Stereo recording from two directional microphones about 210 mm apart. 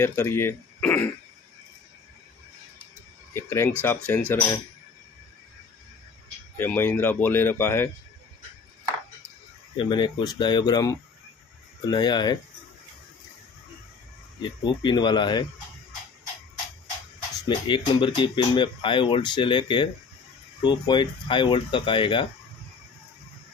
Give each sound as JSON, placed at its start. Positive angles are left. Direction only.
{"t": 0.0, "sound": "speech", "side_deg": 10}
{"t": 3.3, "sound": "speech", "side_deg": 10}
{"t": 6.5, "sound": "speech", "side_deg": 10}
{"t": 9.8, "sound": "speech", "side_deg": 20}
{"t": 14.4, "sound": "speech", "side_deg": 20}
{"t": 17.5, "sound": "speech", "side_deg": 20}